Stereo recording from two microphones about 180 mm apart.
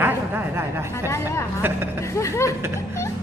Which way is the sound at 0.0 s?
10° right (ahead or behind).